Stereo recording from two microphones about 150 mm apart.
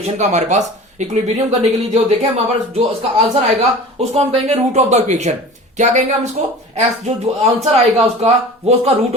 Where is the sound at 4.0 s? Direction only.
45° right (ahead or behind).